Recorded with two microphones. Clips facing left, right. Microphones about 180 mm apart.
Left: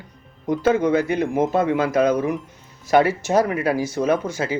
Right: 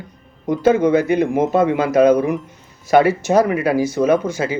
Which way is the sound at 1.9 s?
55° right (ahead or behind).